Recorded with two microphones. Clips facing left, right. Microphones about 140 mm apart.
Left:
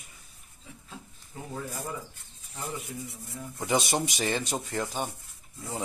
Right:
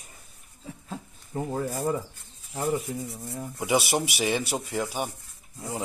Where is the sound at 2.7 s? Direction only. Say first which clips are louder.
Right 6 dB; 30° right (ahead or behind).